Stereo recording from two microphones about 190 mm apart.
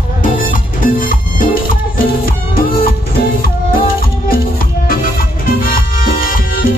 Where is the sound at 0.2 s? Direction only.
45° left (ahead or behind).